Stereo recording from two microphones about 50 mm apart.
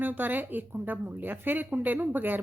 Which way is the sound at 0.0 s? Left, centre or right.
Right.